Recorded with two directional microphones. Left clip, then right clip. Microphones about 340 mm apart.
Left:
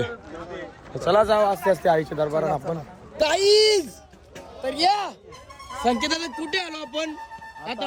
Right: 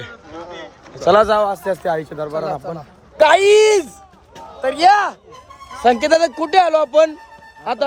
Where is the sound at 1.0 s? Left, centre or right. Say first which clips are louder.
Right 6 dB; right.